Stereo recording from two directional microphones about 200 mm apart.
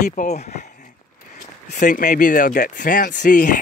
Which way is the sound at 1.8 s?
40° left (ahead or behind).